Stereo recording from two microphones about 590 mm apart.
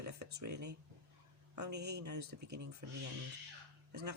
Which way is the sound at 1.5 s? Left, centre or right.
Right.